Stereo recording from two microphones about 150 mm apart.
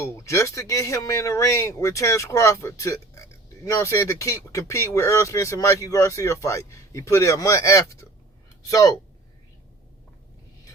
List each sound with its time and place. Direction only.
0.0 s speech: 20° left (ahead or behind)